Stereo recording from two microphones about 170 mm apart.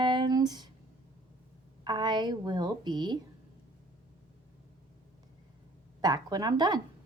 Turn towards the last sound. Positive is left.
turn(degrees=-25)  # may be behind; listen again after turning